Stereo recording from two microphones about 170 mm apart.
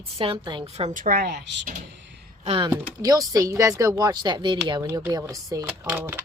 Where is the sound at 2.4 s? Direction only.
35° right (ahead or behind).